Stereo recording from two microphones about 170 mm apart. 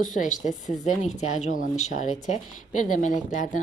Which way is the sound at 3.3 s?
50° left (ahead or behind).